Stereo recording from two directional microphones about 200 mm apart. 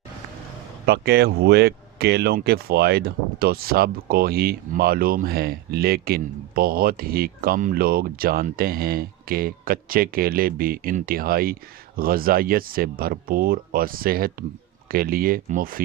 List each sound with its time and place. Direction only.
0.9 s speech: 55° right (ahead or behind)